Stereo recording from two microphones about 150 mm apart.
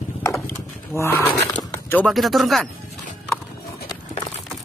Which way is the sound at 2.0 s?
Centre (ahead or behind).